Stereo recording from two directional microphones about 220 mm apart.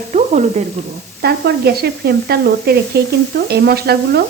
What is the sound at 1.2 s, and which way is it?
Speech, 45° right (ahead or behind).